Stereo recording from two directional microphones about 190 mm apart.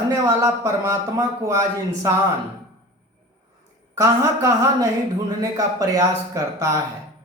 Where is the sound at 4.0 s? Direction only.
15° right (ahead or behind).